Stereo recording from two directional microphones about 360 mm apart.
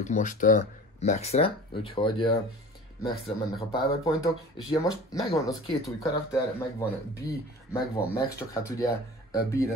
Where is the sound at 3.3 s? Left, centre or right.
Centre.